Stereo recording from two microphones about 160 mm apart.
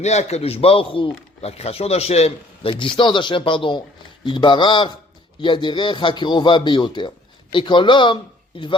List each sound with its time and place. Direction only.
0.0 s a man's voice: 45° left (ahead or behind)